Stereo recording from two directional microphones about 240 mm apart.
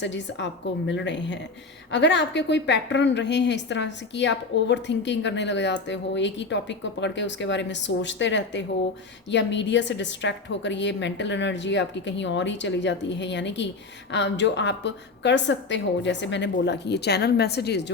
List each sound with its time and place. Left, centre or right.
0.0 s a woman's voice: left